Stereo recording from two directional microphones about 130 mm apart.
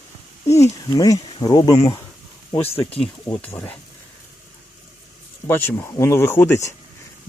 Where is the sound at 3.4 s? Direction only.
10° left (ahead or behind).